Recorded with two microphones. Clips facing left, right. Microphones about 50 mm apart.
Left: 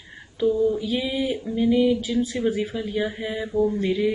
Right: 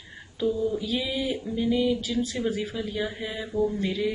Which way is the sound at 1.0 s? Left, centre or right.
Centre.